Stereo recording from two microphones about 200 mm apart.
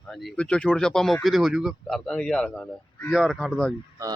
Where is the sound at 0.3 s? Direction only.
5° left (ahead or behind).